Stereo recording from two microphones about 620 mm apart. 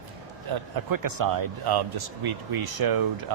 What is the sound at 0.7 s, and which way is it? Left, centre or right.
Speech, right.